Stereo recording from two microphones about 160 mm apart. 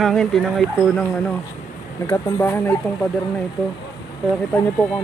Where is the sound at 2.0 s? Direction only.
15° left (ahead or behind).